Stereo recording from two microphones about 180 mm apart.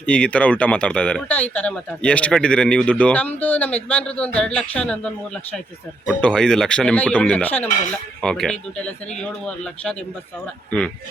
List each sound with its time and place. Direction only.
0.0 s speech: 5° left (ahead or behind)